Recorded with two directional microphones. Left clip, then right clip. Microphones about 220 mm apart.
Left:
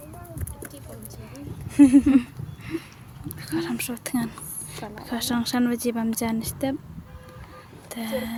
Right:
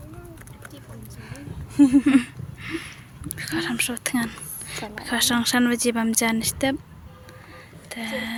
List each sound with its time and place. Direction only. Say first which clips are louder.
1.9 s speech: even; centre (ahead or behind)
7.9 s speech: right 1 dB; 15° left (ahead or behind)